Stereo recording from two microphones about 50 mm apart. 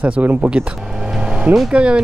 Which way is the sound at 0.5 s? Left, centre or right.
Right.